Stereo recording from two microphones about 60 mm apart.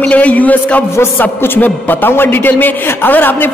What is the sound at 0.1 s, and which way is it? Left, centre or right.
A man's voice, left.